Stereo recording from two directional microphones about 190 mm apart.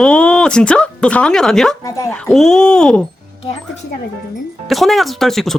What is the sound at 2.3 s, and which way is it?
Speech, centre (ahead or behind).